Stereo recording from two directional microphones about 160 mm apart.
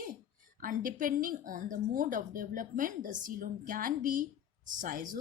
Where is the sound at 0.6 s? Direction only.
55° right (ahead or behind).